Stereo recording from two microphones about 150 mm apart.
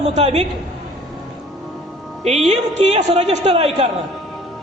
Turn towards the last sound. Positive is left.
turn(degrees=-45)  # may be behind; listen again after turning